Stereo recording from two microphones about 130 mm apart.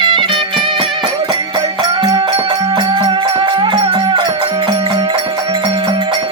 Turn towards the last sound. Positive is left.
turn(degrees=-35)  # may be behind; listen again after turning